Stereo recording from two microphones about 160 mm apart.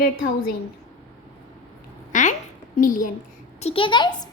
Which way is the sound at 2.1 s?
50° left (ahead or behind).